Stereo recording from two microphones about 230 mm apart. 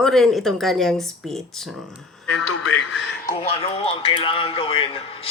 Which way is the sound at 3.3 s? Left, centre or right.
Left.